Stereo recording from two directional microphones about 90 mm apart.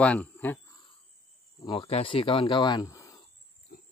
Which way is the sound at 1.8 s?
85° left.